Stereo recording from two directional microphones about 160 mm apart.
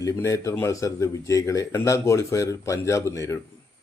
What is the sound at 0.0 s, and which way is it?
Speech, 20° left (ahead or behind).